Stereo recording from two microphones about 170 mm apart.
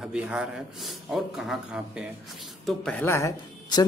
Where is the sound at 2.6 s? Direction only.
5° left (ahead or behind).